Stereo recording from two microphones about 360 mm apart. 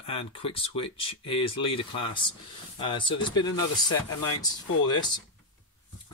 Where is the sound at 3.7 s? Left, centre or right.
Left.